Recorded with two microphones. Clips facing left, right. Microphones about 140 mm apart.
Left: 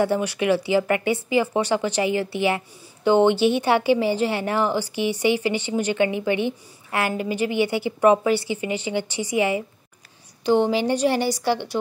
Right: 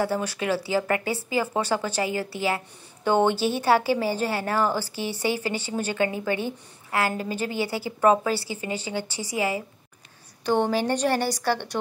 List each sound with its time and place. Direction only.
0.0 s a woman's voice: 25° left (ahead or behind)